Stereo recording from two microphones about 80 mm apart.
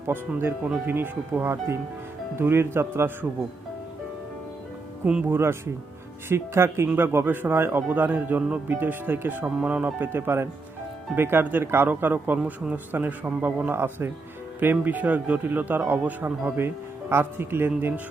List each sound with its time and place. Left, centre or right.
0.1 s a man's voice: right
5.3 s a man's voice: right